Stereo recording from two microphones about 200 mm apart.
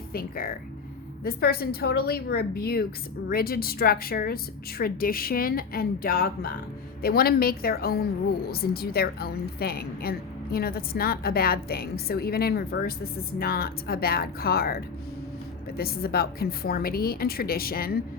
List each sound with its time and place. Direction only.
0.1 s a woman's voice: 45° left (ahead or behind)
15.8 s a woman's voice: 50° left (ahead or behind)